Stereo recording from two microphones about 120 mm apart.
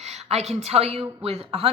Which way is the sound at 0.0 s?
65° right (ahead or behind).